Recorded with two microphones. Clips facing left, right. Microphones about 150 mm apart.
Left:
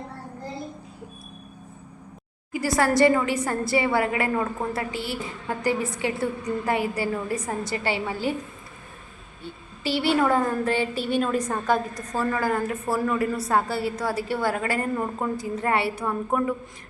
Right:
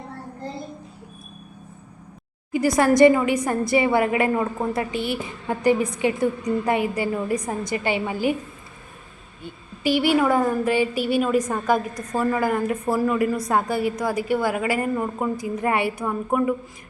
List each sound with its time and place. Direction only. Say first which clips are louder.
2.5 s a woman's voice: right 4 dB; 20° right (ahead or behind)
9.8 s a woman's voice: right 3 dB; 15° right (ahead or behind)